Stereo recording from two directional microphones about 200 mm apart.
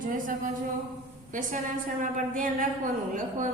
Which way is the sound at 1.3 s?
40° right (ahead or behind).